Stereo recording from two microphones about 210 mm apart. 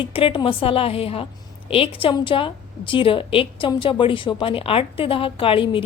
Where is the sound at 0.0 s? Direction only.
25° left (ahead or behind).